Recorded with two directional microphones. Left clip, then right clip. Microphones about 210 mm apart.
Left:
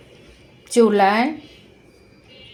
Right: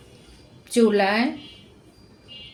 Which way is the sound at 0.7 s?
15° left (ahead or behind).